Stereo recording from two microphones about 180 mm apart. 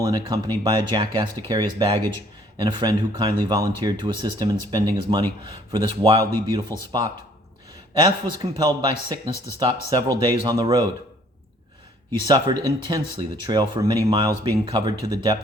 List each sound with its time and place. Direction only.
0.0 s speech: 25° right (ahead or behind)
12.3 s speech: 25° right (ahead or behind)